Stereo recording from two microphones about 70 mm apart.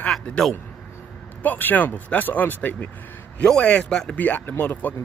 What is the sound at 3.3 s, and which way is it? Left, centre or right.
Speech, centre.